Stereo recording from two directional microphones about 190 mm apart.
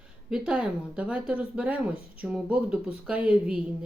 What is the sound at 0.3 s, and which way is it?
Speech, 5° right (ahead or behind).